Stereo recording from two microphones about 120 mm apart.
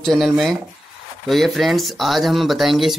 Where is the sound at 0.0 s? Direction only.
Centre (ahead or behind).